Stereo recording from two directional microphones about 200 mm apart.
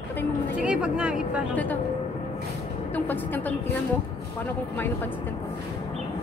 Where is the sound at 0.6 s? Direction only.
5° right (ahead or behind).